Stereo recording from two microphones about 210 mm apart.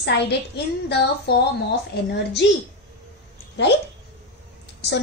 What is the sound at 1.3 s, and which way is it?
Speech, 50° left (ahead or behind).